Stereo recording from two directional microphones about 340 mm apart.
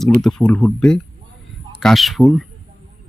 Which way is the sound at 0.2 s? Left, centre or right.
Centre.